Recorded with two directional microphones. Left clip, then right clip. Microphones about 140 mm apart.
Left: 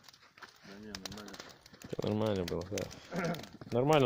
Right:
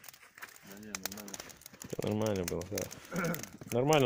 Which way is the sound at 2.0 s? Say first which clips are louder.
Even; 5° left (ahead or behind).